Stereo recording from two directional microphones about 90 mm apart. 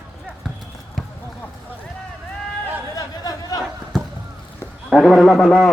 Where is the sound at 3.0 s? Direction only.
45° left (ahead or behind).